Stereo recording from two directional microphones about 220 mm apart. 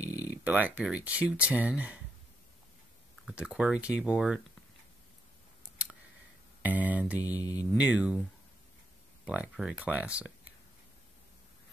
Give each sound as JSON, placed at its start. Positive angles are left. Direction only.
{"t": 0.0, "sound": "a sound", "side_deg": 15}
{"t": 0.4, "sound": "speech", "side_deg": -5}
{"t": 3.3, "sound": "speech", "side_deg": -5}
{"t": 5.6, "sound": "scissors", "side_deg": -5}
{"t": 6.6, "sound": "speech", "side_deg": -5}
{"t": 9.3, "sound": "speech", "side_deg": -5}